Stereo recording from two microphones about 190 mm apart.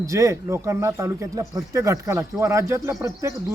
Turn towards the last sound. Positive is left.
turn(degrees=-15)  # may be behind; listen again after turning